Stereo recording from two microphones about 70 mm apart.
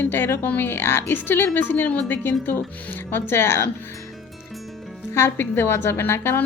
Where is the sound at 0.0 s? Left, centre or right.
Left.